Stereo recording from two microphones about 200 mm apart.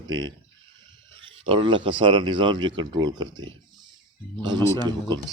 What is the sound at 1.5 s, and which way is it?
Speech, 25° right (ahead or behind).